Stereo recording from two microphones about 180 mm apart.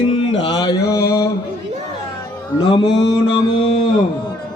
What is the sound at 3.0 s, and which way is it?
Mantra, 90° left.